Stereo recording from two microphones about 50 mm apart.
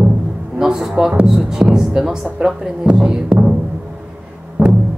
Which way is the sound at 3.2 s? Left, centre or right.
Right.